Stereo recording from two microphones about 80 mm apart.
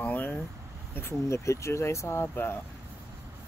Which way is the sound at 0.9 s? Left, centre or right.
Left.